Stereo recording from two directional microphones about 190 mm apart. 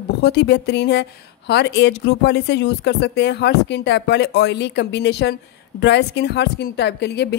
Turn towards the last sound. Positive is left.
turn(degrees=60)  # may be behind; listen again after turning